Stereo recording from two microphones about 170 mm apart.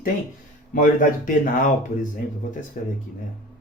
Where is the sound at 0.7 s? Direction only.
50° left (ahead or behind).